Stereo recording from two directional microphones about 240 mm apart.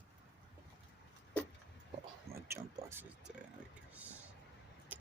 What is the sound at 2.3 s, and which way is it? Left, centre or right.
Speech, centre.